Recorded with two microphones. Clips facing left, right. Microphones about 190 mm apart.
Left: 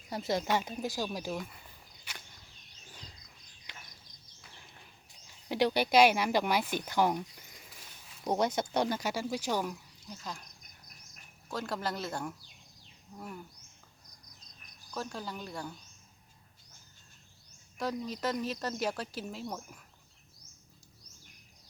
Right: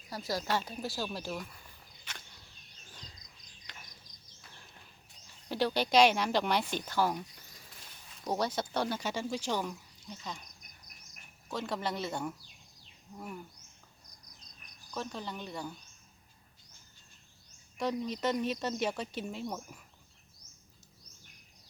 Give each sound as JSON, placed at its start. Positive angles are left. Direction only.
{"t": 0.1, "sound": "speech", "side_deg": 25}
{"t": 2.1, "sound": "a sound", "side_deg": 10}
{"t": 5.2, "sound": "speech", "side_deg": 15}
{"t": 8.0, "sound": "a sound", "side_deg": 5}
{"t": 8.3, "sound": "speech", "side_deg": 20}
{"t": 11.4, "sound": "a woman's voice", "side_deg": 0}
{"t": 14.9, "sound": "a woman's voice", "side_deg": 5}
{"t": 17.7, "sound": "a woman's voice", "side_deg": 5}